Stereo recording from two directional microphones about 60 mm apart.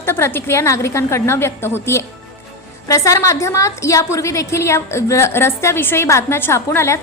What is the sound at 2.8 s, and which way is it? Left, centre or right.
A woman's voice, left.